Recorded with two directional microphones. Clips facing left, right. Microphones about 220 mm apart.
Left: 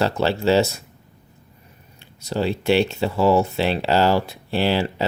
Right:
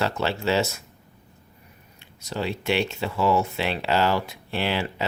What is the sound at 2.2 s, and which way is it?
Speech, 35° left (ahead or behind).